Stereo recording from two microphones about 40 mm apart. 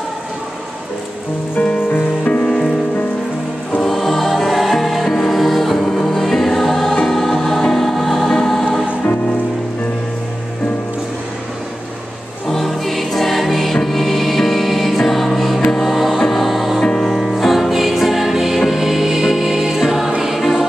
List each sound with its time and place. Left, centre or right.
1.8 s music: left
2.2 s music: left
3.8 s music: centre
12.4 s music: centre
16.8 s music: centre
17.1 s music: centre